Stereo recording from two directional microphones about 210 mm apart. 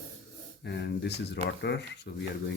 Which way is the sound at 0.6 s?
50° left (ahead or behind).